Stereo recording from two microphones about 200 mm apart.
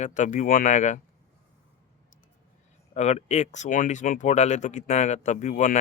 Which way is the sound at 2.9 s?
35° left (ahead or behind).